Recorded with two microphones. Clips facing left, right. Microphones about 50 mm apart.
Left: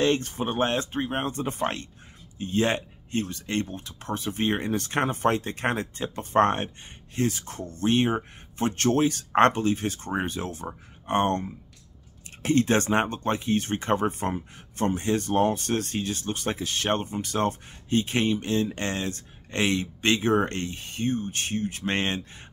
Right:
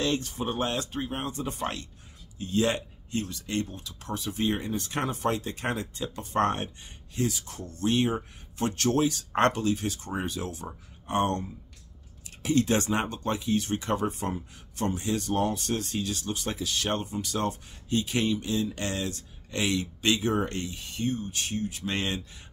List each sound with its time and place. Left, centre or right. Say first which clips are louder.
0.0 s speech: left 4 dB; left
4.6 s speech: left 4 dB; left